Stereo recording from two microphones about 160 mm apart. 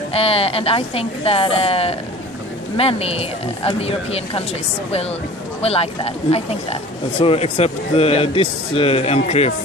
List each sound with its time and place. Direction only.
0.1 s speech: 35° left (ahead or behind)